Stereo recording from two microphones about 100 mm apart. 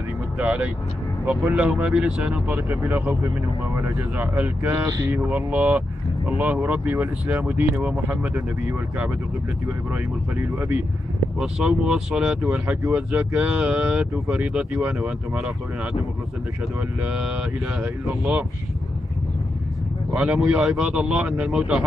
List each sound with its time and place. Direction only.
0.4 s speech: 15° right (ahead or behind)
9.9 s speech: 20° right (ahead or behind)
11.3 s speech: 5° right (ahead or behind)
17.0 s speech: 10° right (ahead or behind)
20.2 s speech: 10° right (ahead or behind)